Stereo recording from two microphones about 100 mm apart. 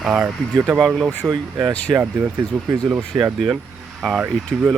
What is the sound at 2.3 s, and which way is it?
Speech, 10° right (ahead or behind).